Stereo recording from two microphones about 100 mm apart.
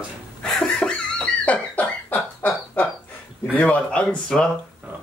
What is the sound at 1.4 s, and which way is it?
Dog, 15° left (ahead or behind).